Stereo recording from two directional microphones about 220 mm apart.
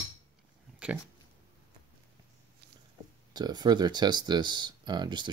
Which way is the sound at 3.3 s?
20° right (ahead or behind).